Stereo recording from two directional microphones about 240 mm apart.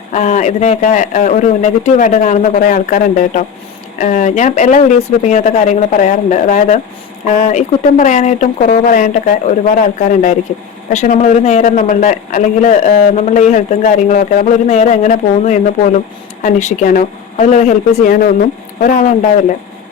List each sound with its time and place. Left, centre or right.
0.1 s a man's voice: left